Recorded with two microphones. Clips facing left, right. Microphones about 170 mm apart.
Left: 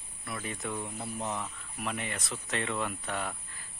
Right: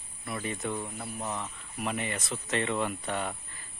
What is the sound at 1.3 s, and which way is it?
Speech, centre (ahead or behind).